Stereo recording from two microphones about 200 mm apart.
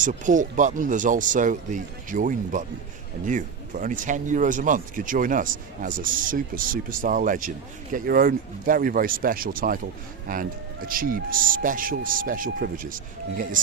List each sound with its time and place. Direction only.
0.0 s speech: 40° right (ahead or behind)
10.8 s speech: 45° right (ahead or behind)